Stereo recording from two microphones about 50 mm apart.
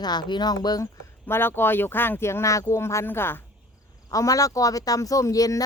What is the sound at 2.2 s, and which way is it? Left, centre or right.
Speech, left.